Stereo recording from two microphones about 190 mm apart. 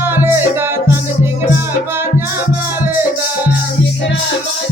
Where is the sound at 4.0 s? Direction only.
70° left (ahead or behind).